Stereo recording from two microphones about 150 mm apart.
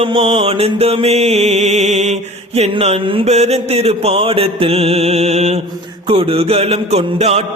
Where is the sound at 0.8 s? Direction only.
40° right (ahead or behind).